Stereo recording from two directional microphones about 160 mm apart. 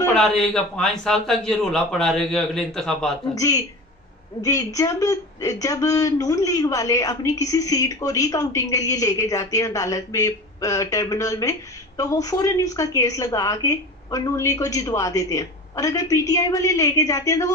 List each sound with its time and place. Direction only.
0.1 s a man's voice: 5° left (ahead or behind)
3.3 s a woman's voice: 20° left (ahead or behind)